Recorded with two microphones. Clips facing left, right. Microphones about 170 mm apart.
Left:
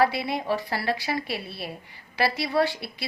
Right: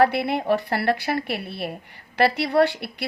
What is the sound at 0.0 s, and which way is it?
A woman's voice, 60° right (ahead or behind).